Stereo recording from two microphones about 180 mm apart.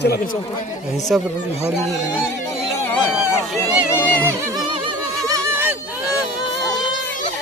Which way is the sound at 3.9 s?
10° left (ahead or behind).